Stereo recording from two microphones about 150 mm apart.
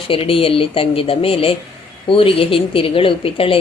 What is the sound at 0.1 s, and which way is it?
A woman's voice, 40° left (ahead or behind).